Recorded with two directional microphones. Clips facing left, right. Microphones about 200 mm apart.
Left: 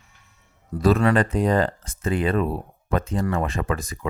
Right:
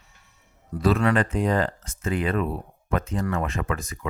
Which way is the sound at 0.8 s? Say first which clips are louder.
Left 3 dB; 40° left (ahead or behind).